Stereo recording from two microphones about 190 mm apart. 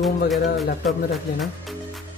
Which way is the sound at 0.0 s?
Centre (ahead or behind).